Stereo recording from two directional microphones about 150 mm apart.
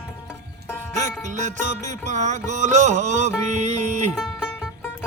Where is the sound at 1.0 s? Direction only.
55° right (ahead or behind).